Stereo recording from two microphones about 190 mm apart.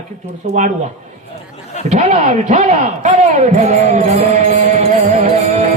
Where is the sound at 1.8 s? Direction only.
40° right (ahead or behind).